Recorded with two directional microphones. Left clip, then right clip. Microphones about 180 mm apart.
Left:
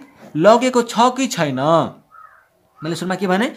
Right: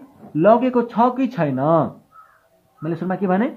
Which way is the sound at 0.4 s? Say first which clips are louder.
Left 2 dB; 25° left (ahead or behind).